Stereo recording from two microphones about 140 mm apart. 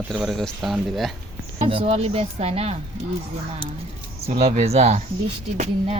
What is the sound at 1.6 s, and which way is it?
Speech, 45° right (ahead or behind).